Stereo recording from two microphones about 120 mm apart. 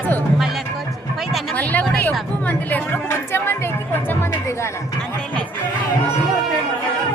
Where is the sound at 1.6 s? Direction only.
15° left (ahead or behind).